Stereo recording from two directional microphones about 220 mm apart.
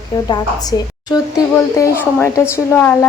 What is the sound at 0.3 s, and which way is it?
A woman's voice, 15° left (ahead or behind).